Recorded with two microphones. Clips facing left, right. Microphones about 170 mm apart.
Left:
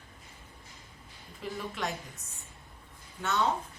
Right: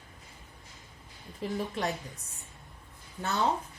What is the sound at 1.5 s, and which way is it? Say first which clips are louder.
Speech: right 3 dB; 35° right (ahead or behind).